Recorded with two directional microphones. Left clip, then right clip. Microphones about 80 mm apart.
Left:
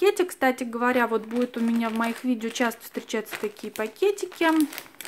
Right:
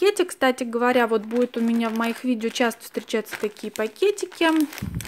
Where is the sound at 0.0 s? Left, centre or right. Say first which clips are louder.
Right 2 dB; right.